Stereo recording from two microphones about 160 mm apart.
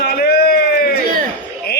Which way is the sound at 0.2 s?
70° left (ahead or behind).